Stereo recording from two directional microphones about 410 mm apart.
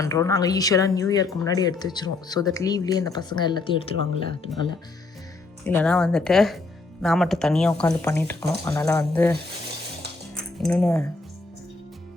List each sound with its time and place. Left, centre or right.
0.0 s speech: centre
3.9 s speech: right
5.6 s speech: centre
10.3 s music: centre